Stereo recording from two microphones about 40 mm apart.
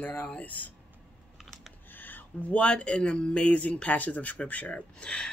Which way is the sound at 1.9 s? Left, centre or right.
Left.